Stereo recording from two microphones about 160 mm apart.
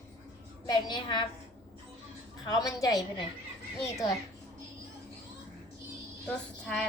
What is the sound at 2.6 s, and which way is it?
Speech, 20° left (ahead or behind).